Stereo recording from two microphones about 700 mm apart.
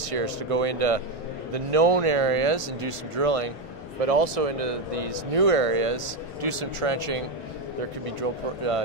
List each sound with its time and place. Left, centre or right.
0.0 s speech: right